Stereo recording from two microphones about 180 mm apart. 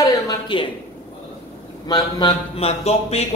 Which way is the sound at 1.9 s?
20° left (ahead or behind).